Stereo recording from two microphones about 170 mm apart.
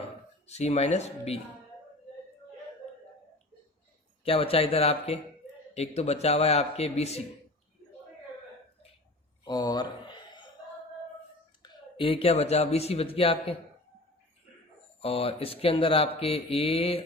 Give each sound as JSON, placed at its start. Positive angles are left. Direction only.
{"t": 0.4, "sound": "speech", "side_deg": 40}
{"t": 4.2, "sound": "speech", "side_deg": 35}
{"t": 9.4, "sound": "a sound", "side_deg": 25}
{"t": 11.6, "sound": "speech", "side_deg": 30}
{"t": 15.0, "sound": "speech", "side_deg": 35}